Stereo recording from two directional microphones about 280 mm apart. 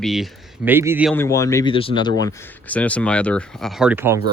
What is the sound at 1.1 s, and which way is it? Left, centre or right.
Speech, centre.